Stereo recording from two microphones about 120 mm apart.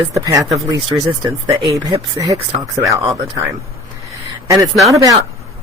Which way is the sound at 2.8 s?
30° right (ahead or behind).